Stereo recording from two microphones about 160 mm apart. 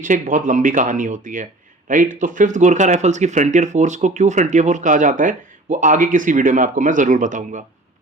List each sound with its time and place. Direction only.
0.0 s speech: 55° right (ahead or behind)